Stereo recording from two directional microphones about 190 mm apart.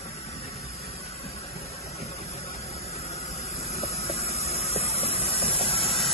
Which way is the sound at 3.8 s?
30° left (ahead or behind).